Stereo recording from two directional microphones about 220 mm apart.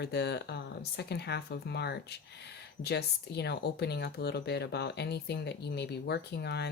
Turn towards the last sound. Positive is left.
turn(degrees=50)  # may be behind; listen again after turning